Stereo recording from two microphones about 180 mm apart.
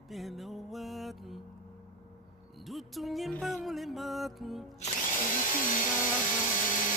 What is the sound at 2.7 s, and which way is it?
Music, centre (ahead or behind).